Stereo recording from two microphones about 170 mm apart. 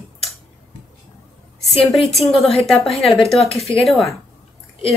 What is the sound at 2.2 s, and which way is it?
Speech, 35° left (ahead or behind).